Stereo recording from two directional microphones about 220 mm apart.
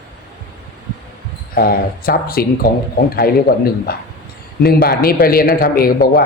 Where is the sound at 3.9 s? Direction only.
45° left (ahead or behind).